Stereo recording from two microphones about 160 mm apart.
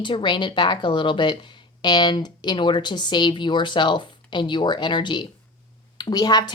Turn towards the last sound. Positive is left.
turn(degrees=25)  # may be behind; listen again after turning